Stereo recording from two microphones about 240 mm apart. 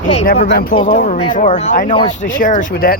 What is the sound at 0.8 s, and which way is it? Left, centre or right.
Speech, left.